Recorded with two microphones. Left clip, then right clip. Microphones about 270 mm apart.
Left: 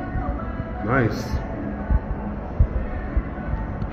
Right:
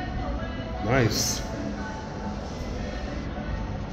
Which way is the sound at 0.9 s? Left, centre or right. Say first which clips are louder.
Left 2 dB; centre.